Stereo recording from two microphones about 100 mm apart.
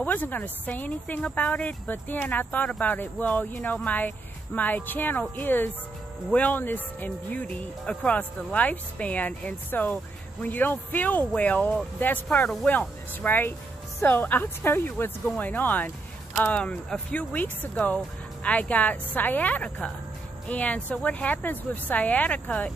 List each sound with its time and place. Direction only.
0.0 s speech: 20° left (ahead or behind)
12.7 s speech: 20° left (ahead or behind)